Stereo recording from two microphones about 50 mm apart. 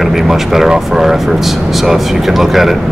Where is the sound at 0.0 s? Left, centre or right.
Centre.